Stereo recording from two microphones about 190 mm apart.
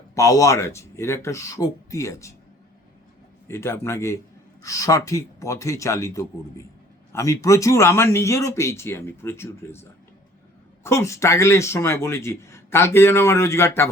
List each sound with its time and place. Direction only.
0.1 s speech: 15° left (ahead or behind)
3.4 s speech: 15° left (ahead or behind)
10.8 s speech: 15° left (ahead or behind)